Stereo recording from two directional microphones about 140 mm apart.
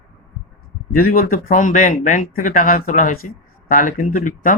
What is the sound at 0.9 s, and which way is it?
Speech, 90° left.